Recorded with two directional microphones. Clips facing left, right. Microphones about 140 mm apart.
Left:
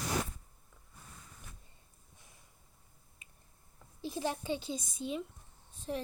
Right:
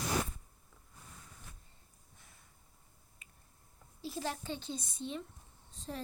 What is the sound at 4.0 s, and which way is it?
Speech, 20° left (ahead or behind).